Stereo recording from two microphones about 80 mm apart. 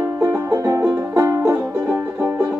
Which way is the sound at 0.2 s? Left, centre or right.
Right.